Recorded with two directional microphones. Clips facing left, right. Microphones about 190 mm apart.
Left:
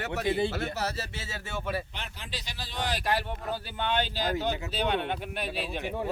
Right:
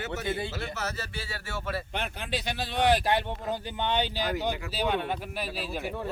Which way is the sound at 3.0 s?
20° right (ahead or behind).